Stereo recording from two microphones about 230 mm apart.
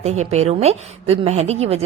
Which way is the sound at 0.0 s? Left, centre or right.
Right.